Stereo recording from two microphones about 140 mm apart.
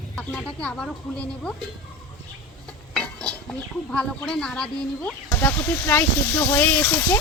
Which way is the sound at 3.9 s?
5° left (ahead or behind).